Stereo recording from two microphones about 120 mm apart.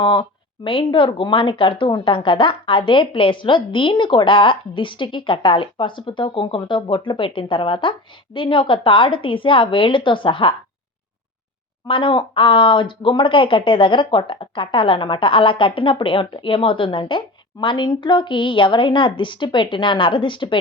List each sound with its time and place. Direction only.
0.0 s speech: 45° left (ahead or behind)
11.9 s speech: 45° left (ahead or behind)